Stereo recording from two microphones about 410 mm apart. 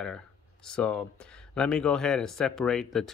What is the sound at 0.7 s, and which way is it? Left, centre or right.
Speech, centre.